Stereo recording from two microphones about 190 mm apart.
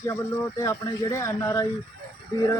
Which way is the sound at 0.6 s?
15° left (ahead or behind).